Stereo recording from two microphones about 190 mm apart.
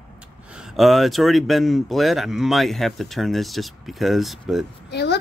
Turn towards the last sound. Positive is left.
turn(degrees=60)  # may be behind; listen again after turning